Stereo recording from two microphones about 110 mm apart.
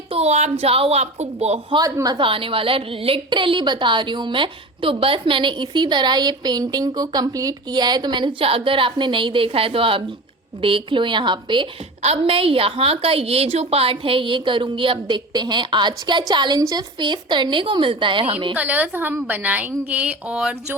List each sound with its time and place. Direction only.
0.1 s a woman's voice: 80° right
2.1 s a woman's voice: 55° right (ahead or behind)
8.4 s a woman's voice: 55° right (ahead or behind)
12.0 s a woman's voice: 60° right (ahead or behind)
18.5 s a woman's voice: 15° right (ahead or behind)